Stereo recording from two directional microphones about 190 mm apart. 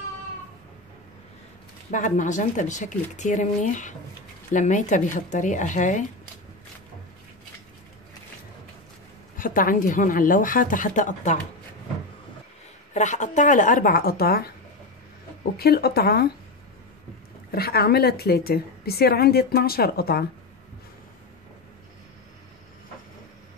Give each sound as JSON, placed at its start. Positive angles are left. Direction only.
{"t": 1.9, "sound": "speech", "side_deg": 40}
{"t": 9.4, "sound": "a woman's voice", "side_deg": 45}
{"t": 12.9, "sound": "a woman's voice", "side_deg": 40}
{"t": 15.5, "sound": "speech", "side_deg": 55}
{"t": 17.5, "sound": "a woman's voice", "side_deg": 55}